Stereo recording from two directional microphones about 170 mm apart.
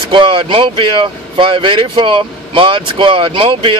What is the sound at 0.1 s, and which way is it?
Speech, 30° right (ahead or behind).